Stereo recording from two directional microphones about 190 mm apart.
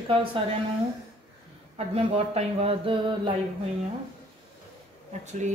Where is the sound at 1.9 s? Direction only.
30° right (ahead or behind).